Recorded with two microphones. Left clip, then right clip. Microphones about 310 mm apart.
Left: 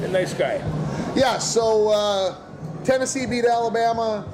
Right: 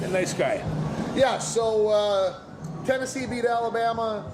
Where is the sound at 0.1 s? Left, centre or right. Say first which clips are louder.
Left 2 dB; right.